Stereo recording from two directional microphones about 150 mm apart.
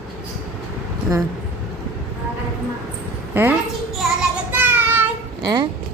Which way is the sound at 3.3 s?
15° right (ahead or behind).